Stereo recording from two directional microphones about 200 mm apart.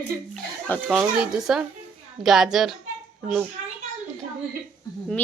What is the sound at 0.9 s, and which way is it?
Speech, 5° right (ahead or behind).